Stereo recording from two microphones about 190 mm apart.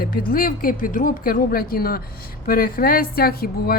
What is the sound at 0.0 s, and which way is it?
A woman's voice, 50° left (ahead or behind).